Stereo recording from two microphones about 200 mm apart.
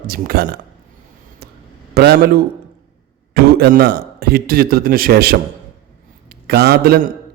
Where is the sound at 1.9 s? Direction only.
50° right (ahead or behind).